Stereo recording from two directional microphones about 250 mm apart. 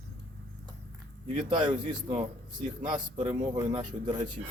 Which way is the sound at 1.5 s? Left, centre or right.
Centre.